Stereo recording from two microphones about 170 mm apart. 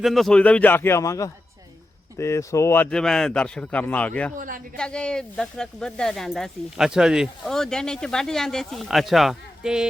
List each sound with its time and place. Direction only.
0.0 s a man's voice: centre (ahead or behind)
4.4 s speech: 50° right (ahead or behind)
4.8 s speech: 5° left (ahead or behind)